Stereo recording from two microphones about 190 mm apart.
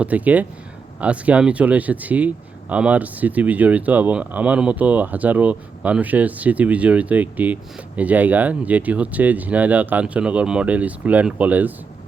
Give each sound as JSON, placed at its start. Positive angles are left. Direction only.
{"t": 0.0, "sound": "speech", "side_deg": -10}